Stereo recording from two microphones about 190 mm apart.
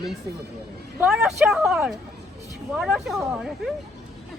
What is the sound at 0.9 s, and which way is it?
Speech, 5° right (ahead or behind).